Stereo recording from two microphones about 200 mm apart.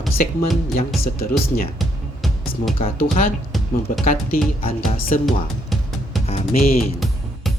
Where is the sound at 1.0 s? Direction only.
50° left (ahead or behind).